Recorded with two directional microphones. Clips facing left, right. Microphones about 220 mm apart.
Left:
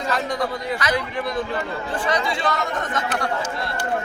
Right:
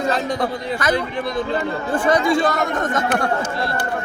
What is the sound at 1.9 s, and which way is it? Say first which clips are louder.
Speech: right 8 dB; 45° right (ahead or behind).